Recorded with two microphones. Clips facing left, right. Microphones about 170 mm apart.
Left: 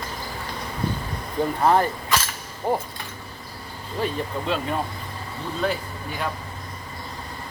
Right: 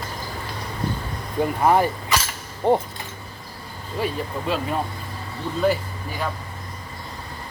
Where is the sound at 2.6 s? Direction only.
25° right (ahead or behind).